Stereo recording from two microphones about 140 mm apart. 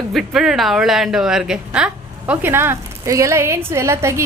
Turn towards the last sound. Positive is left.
turn(degrees=-20)  # may be behind; listen again after turning